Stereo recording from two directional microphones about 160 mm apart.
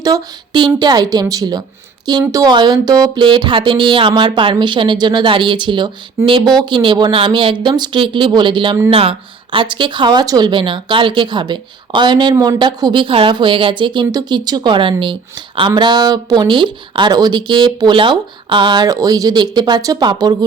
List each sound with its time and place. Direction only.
0.0 s speech: 25° right (ahead or behind)